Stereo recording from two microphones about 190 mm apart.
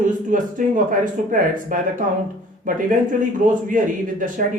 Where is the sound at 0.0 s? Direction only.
45° right (ahead or behind).